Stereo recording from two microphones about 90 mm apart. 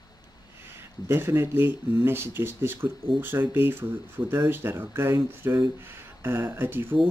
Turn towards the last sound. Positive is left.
turn(degrees=-25)  # may be behind; listen again after turning